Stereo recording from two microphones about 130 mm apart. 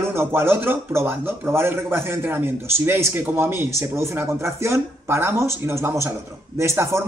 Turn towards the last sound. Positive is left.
turn(degrees=-20)  # may be behind; listen again after turning